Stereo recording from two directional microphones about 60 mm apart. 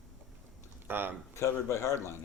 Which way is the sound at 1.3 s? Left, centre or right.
Left.